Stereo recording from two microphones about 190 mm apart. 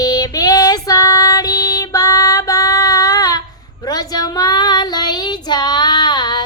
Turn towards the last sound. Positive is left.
turn(degrees=20)  # may be behind; listen again after turning